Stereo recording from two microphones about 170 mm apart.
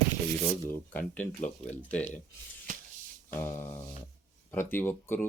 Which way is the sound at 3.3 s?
15° left (ahead or behind).